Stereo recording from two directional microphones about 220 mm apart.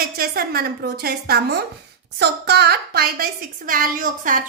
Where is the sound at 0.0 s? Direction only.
40° right (ahead or behind).